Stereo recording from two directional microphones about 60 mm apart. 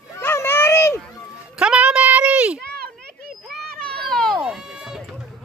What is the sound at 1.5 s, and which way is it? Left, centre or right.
Music, centre.